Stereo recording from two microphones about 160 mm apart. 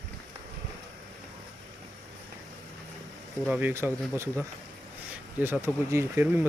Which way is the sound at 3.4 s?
10° right (ahead or behind).